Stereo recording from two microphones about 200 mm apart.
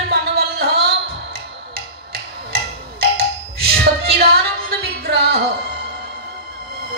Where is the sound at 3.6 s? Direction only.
50° right (ahead or behind).